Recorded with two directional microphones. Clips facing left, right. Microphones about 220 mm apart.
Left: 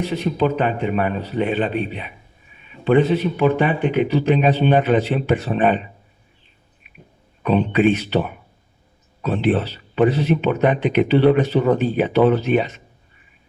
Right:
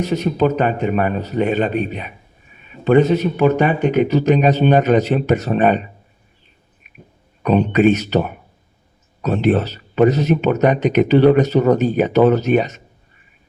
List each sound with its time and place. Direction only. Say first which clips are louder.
0.0 s a man's voice: right 3 dB; 45° right (ahead or behind)
6.8 s a sound: right 2 dB; 45° right (ahead or behind)
7.4 s a man's voice: right 3 dB; 45° right (ahead or behind)